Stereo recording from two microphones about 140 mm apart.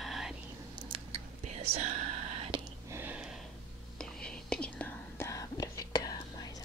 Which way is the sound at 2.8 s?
20° right (ahead or behind).